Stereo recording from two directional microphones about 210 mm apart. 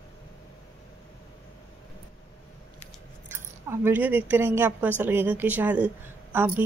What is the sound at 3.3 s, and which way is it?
Keys jangling, 10° right (ahead or behind).